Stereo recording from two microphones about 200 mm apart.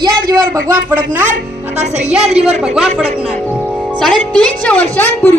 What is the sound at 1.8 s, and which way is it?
Speech, 35° right (ahead or behind).